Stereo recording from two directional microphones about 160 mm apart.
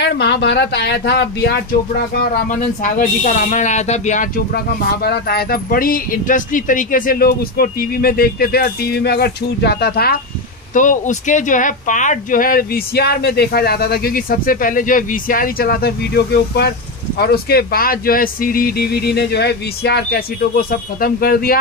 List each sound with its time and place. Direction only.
0.0 s speech: 90° left
2.5 s speech: 50° left (ahead or behind)
4.6 s speech: 85° left
10.7 s speech: 50° left (ahead or behind); by 16.7 s 90° left
17.2 s speech: 80° left